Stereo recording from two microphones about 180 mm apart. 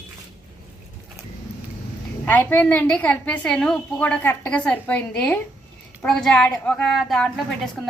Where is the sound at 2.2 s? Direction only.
10° left (ahead or behind).